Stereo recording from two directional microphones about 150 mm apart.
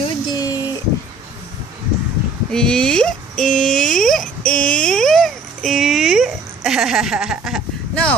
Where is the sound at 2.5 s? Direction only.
5° left (ahead or behind).